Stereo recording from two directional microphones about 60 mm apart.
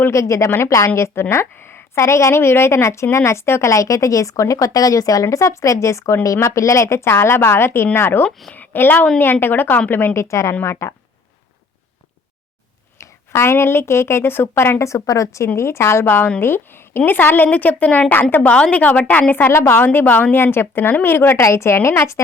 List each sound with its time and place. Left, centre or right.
0.1 s speech: left
0.9 s speech: left
2.0 s a woman's voice: left
3.7 s a woman's voice: left
10.2 s speech: left
10.5 s a woman's voice: left
13.0 s speech: left
15.5 s a woman's voice: left
18.5 s a woman's voice: centre
18.8 s a woman's voice: left
19.5 s a woman's voice: left